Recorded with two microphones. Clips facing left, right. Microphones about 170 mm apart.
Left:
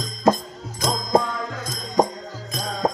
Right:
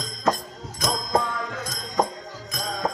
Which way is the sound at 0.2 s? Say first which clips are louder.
Left 5 dB; 30° left (ahead or behind).